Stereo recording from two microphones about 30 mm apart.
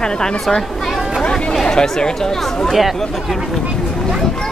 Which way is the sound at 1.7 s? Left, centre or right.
Left.